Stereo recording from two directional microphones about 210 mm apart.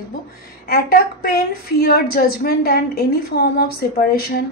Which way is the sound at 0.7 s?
45° left (ahead or behind).